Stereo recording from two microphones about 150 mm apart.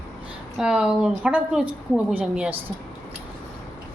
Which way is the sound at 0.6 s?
5° right (ahead or behind).